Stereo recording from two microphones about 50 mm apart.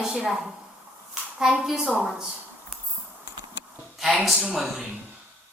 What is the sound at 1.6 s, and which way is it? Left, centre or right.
Speech, centre.